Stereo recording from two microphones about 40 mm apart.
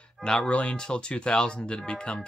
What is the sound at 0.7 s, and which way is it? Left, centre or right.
Speech, left.